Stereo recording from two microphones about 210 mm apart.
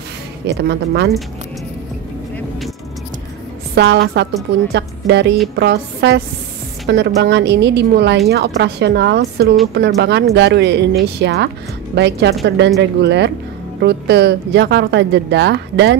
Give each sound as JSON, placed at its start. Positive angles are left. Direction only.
{"t": 0.5, "sound": "speech", "side_deg": -50}
{"t": 3.7, "sound": "a woman's voice", "side_deg": -55}